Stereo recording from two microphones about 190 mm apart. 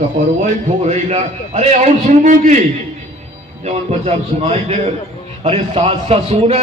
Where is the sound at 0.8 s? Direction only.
35° right (ahead or behind).